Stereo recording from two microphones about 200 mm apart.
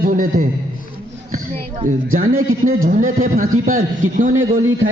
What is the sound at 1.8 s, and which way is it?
A man's voice, 40° right (ahead or behind).